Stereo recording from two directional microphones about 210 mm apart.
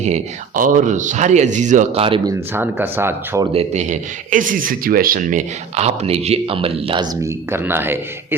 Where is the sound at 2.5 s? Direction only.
10° right (ahead or behind).